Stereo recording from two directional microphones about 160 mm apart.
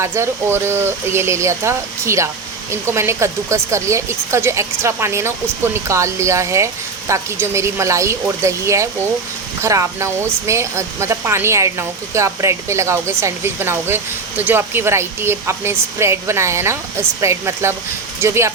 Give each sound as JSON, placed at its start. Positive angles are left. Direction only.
{"t": 0.0, "sound": "speech", "side_deg": -15}